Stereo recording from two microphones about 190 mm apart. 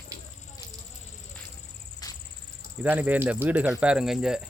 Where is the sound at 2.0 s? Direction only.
20° left (ahead or behind).